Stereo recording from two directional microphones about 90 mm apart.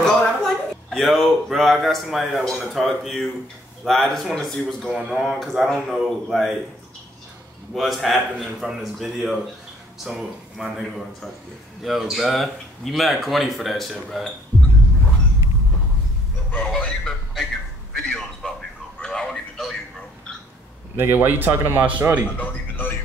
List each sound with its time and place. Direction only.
0.0 s speech: 5° left (ahead or behind)
7.7 s speech: centre (ahead or behind)
11.8 s speech: centre (ahead or behind)
16.5 s speech: 10° left (ahead or behind)
17.9 s a sound: 5° left (ahead or behind)
20.9 s speech: 25° right (ahead or behind)
22.4 s speech: 25° left (ahead or behind)